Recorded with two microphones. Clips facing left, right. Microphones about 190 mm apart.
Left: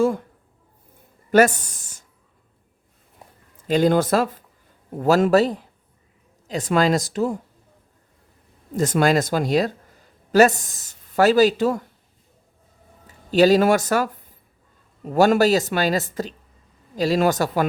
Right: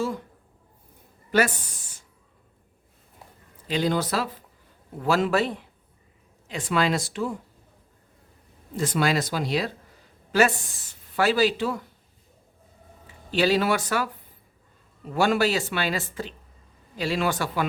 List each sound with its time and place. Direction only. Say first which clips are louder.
1.3 s a sound: left 7 dB; 45° left (ahead or behind)
3.7 s speech: left 7 dB; 50° left (ahead or behind)
8.7 s speech: left 6 dB; 45° left (ahead or behind)
13.1 s speech: left 8 dB; 40° left (ahead or behind)